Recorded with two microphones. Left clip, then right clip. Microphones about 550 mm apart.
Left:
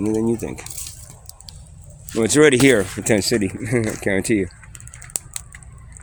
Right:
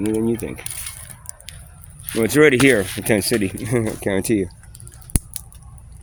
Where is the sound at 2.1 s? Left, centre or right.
Right.